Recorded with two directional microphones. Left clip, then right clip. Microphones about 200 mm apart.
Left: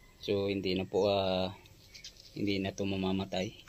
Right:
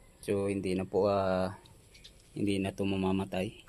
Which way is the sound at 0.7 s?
5° right (ahead or behind).